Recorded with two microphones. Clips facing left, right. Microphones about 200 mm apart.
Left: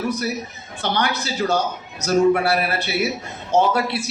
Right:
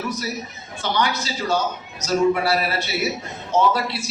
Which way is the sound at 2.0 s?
55° left (ahead or behind).